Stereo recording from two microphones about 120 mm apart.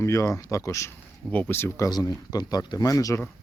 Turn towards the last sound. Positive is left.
turn(degrees=30)  # may be behind; listen again after turning